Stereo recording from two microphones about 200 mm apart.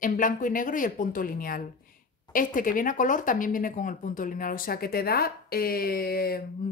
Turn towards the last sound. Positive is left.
turn(degrees=50)  # may be behind; listen again after turning